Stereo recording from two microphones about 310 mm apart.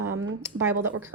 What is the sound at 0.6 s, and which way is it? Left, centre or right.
Speech, centre.